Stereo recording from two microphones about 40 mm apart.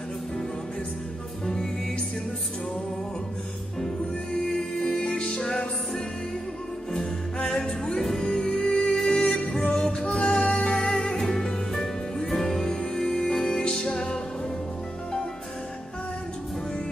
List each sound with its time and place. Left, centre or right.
1.4 s music: centre
4.5 s music: centre
6.9 s music: centre